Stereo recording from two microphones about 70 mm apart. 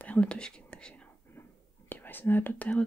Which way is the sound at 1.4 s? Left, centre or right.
Left.